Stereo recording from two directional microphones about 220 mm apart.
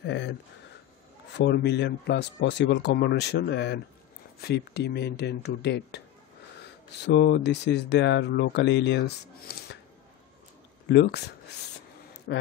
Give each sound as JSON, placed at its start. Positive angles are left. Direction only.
{"t": 0.0, "sound": "speech", "side_deg": 55}
{"t": 10.9, "sound": "speech", "side_deg": 50}